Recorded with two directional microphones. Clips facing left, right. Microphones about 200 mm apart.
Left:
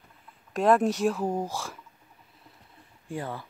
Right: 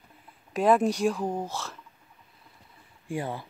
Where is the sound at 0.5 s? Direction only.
Centre (ahead or behind).